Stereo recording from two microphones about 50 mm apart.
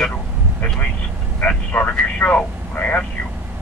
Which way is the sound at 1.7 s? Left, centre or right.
Left.